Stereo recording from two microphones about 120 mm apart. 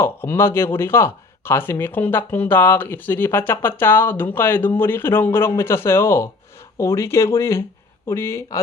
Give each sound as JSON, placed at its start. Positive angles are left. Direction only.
{"t": 0.0, "sound": "speech", "side_deg": 20}